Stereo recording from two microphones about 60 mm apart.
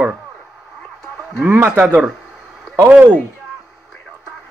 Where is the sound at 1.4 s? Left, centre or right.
Right.